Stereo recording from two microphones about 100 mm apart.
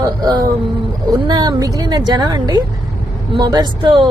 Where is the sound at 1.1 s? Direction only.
45° right (ahead or behind).